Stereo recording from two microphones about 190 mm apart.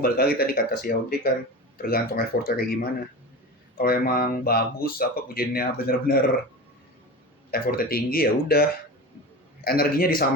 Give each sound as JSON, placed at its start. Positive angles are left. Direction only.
{"t": 0.0, "sound": "speech", "side_deg": 55}
{"t": 3.8, "sound": "speech", "side_deg": 50}
{"t": 7.5, "sound": "speech", "side_deg": 50}
{"t": 9.6, "sound": "speech", "side_deg": 50}